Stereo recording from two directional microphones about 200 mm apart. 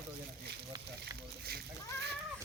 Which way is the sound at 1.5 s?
55° right (ahead or behind).